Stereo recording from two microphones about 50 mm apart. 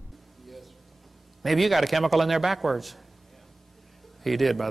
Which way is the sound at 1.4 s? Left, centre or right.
Centre.